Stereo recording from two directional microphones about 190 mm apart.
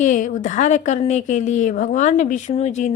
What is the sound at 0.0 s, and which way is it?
A woman's voice, 40° left (ahead or behind).